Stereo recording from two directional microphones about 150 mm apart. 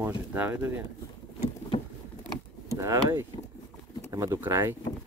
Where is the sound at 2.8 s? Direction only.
15° right (ahead or behind).